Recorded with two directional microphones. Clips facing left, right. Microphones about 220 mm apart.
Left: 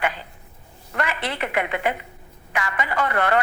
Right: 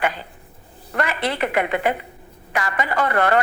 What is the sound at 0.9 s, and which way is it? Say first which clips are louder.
A woman's voice: right 4 dB; 40° right (ahead or behind).